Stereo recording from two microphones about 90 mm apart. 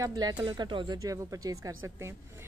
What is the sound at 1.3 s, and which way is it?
Speech, 40° right (ahead or behind).